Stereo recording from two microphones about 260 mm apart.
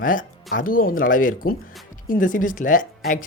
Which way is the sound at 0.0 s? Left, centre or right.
Left.